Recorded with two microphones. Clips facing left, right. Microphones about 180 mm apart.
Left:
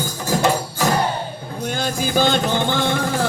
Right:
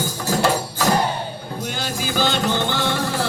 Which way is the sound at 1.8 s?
50° left (ahead or behind).